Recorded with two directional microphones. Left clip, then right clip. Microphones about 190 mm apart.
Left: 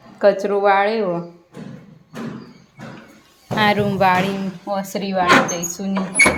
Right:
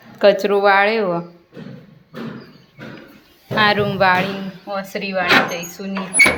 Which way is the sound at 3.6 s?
15° left (ahead or behind).